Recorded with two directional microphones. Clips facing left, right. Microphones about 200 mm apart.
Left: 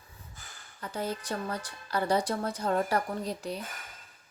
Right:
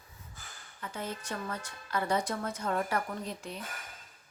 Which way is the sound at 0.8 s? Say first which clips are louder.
Left 5 dB; 35° left (ahead or behind).